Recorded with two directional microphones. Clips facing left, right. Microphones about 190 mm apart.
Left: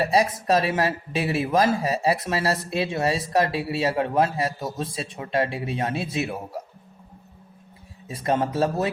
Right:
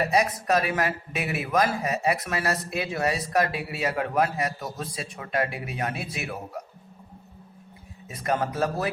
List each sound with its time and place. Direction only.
0.0 s speech: 30° left (ahead or behind)
8.0 s speech: 30° left (ahead or behind)